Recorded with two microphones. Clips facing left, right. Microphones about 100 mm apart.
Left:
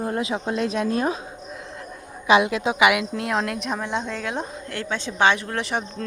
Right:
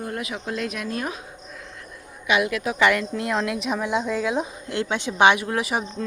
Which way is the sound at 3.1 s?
Centre (ahead or behind).